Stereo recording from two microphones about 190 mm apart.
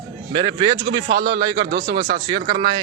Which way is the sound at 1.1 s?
50° right (ahead or behind).